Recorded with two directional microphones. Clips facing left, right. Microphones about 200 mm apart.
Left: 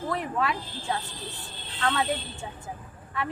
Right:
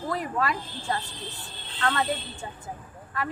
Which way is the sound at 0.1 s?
Centre (ahead or behind).